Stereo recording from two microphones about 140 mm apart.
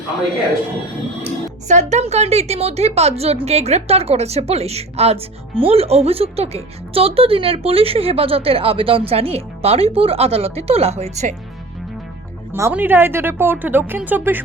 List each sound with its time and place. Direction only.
1.6 s speech: 55° right (ahead or behind)
12.5 s a woman's voice: 15° right (ahead or behind)